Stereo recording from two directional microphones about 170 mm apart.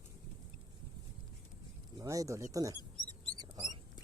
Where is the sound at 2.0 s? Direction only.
20° right (ahead or behind).